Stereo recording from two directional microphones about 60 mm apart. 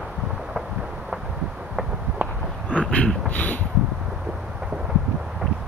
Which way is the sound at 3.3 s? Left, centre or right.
Left.